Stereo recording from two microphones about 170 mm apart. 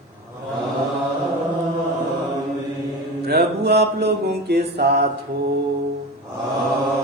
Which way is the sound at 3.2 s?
70° right (ahead or behind).